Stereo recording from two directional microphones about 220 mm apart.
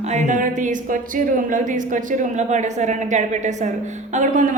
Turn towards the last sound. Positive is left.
turn(degrees=-35)  # may be behind; listen again after turning